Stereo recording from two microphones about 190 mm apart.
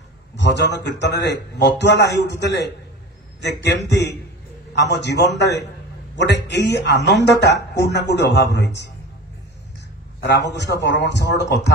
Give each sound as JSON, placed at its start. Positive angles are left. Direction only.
{"t": 0.4, "sound": "a man's voice", "side_deg": 65}
{"t": 10.2, "sound": "a man's voice", "side_deg": 65}